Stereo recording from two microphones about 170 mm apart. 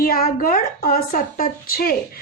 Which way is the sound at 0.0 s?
60° left (ahead or behind).